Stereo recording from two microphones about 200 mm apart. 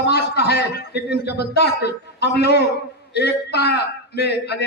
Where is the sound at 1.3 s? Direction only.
55° left (ahead or behind).